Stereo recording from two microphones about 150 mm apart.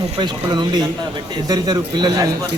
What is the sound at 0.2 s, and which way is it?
A man's voice, 30° right (ahead or behind).